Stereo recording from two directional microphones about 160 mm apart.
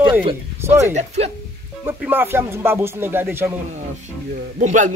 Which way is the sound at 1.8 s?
15° right (ahead or behind).